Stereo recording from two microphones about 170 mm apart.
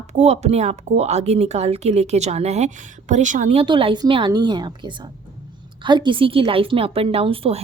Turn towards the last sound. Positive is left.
turn(degrees=-30)  # may be behind; listen again after turning